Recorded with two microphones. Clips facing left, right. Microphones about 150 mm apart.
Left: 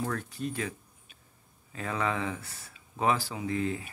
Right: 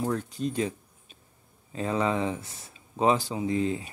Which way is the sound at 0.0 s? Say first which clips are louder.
Right 4 dB; 20° right (ahead or behind).